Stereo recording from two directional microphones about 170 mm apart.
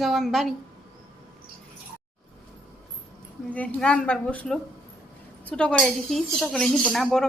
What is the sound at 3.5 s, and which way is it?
A woman's voice, 5° left (ahead or behind).